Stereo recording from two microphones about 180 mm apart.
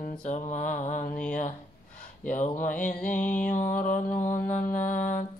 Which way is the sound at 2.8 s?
5° left (ahead or behind).